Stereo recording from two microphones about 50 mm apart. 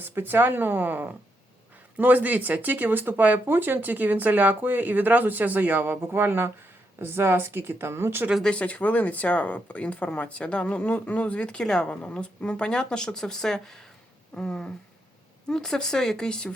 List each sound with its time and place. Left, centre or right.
0.0 s speech: right
8.4 s speech: left